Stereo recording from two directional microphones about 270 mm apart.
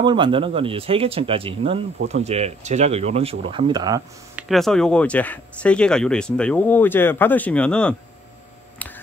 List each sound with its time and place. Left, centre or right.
0.0 s speech: centre
4.5 s speech: centre